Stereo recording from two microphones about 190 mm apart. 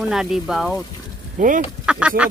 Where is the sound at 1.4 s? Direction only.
45° right (ahead or behind).